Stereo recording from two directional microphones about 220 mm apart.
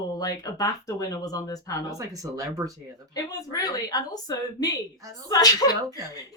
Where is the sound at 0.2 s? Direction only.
15° left (ahead or behind).